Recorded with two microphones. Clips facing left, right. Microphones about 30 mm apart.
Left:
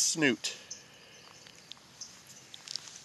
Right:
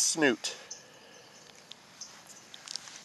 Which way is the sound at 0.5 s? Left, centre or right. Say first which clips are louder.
Right 1 dB; centre.